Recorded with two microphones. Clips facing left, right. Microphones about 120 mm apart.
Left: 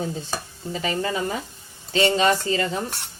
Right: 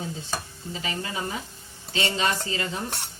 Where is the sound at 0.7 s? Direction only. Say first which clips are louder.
Left 7 dB; 45° left (ahead or behind).